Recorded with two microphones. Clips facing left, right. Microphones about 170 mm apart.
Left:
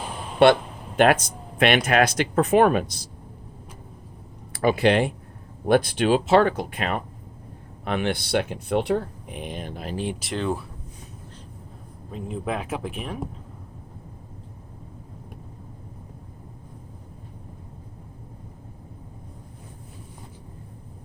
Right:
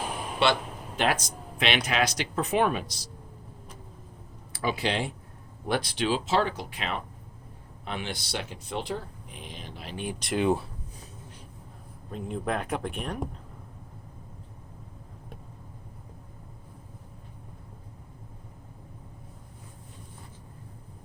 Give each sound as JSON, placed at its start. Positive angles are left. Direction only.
{"t": 0.4, "sound": "speech", "side_deg": 55}
{"t": 4.5, "sound": "speech", "side_deg": 55}
{"t": 10.3, "sound": "speech", "side_deg": -15}
{"t": 12.1, "sound": "speech", "side_deg": 0}